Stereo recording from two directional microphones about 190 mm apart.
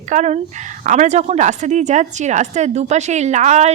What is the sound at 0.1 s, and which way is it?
Speech, 40° right (ahead or behind).